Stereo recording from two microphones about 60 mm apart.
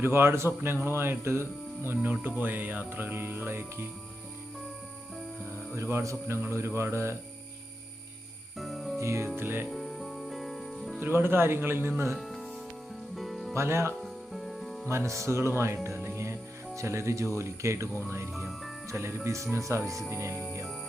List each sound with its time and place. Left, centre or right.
0.0 s speech: right
5.7 s speech: right
8.5 s music: centre
9.0 s speech: right
9.6 s music: centre
11.0 s speech: right
12.1 s music: centre
13.5 s speech: right
14.0 s music: centre
14.8 s speech: right